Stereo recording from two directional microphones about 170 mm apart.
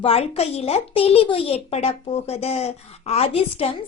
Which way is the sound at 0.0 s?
35° left (ahead or behind).